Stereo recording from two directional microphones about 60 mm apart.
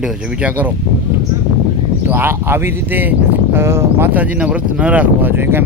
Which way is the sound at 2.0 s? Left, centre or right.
Right.